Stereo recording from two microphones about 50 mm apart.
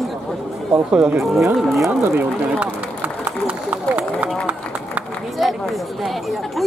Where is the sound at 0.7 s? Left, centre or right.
Centre.